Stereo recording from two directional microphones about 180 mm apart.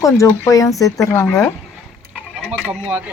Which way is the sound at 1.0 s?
5° left (ahead or behind).